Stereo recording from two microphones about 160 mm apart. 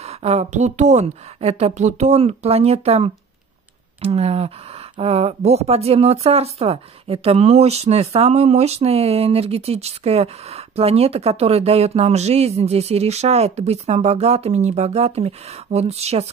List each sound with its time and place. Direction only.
0.0 s speech: 40° right (ahead or behind)